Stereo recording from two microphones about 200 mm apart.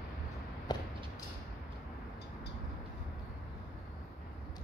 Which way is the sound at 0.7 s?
20° left (ahead or behind).